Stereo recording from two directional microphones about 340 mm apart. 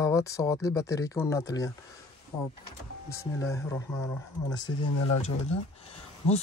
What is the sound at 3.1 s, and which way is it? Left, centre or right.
Speech, centre.